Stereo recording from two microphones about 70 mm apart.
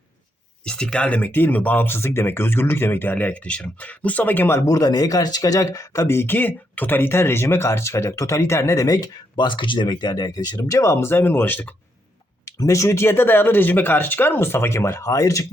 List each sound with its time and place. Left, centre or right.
0.6 s speech: centre
4.4 s speech: left
4.7 s speech: left
10.6 s speech: left
12.5 s speech: left
15.1 s speech: left